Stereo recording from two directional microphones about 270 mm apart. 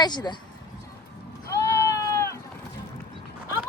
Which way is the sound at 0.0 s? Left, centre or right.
Centre.